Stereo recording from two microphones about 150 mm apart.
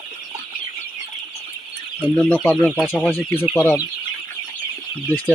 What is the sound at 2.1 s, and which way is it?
Speech, 10° left (ahead or behind).